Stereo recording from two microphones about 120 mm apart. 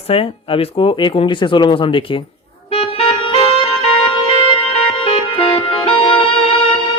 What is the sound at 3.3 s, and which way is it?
Music, 45° left (ahead or behind).